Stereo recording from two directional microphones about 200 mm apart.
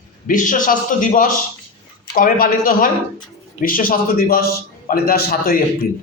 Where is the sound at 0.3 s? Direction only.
40° left (ahead or behind).